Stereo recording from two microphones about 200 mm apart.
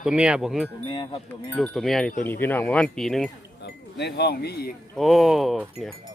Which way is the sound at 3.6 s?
55° left (ahead or behind).